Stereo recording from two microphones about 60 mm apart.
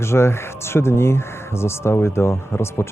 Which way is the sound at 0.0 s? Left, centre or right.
Left.